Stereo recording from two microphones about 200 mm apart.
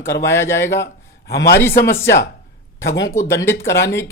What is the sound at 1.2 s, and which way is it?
Speech, 55° left (ahead or behind).